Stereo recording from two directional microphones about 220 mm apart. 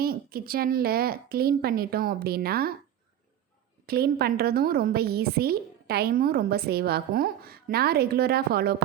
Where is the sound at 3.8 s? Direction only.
45° right (ahead or behind).